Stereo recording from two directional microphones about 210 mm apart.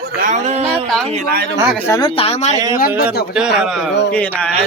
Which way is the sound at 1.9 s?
20° left (ahead or behind).